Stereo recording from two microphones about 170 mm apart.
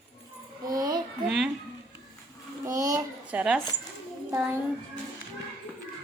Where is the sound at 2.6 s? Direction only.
20° right (ahead or behind).